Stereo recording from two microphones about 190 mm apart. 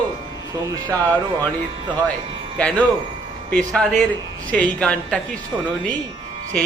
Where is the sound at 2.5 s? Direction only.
5° left (ahead or behind).